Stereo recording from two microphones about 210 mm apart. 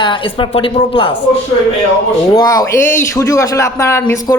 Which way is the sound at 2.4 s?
15° left (ahead or behind).